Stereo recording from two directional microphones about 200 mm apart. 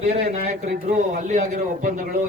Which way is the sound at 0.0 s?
30° right (ahead or behind).